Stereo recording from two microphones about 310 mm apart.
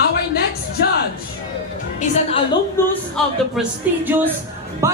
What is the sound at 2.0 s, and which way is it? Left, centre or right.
Speech, left.